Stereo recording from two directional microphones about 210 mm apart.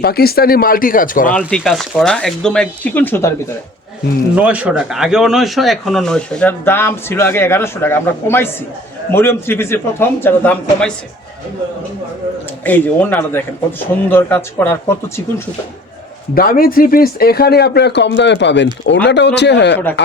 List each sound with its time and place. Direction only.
0.0 s speech: 45° left (ahead or behind)
1.3 s speech: 5° left (ahead or behind)
4.4 s a man's voice: 5° right (ahead or behind)
12.6 s a man's voice: 10° left (ahead or behind)
16.3 s a man's voice: 45° left (ahead or behind)